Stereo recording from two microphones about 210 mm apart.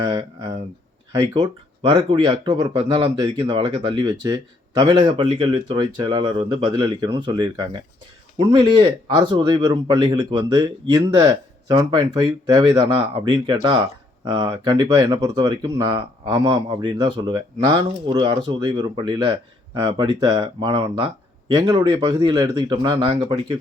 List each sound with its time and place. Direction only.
0.0 s speech: 20° right (ahead or behind)